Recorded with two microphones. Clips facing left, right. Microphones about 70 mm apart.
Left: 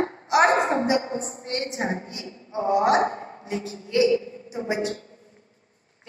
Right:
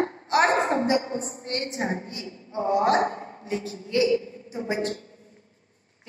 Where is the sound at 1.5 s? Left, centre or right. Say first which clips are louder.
Left 1 dB; left.